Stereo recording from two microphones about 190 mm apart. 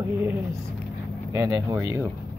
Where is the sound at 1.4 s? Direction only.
15° right (ahead or behind).